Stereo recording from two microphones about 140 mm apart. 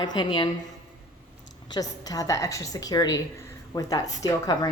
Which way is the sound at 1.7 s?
25° left (ahead or behind).